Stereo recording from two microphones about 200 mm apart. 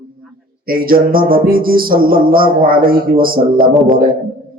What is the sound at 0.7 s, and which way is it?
Speech, 45° right (ahead or behind).